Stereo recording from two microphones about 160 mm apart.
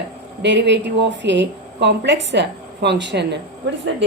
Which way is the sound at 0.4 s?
90° right.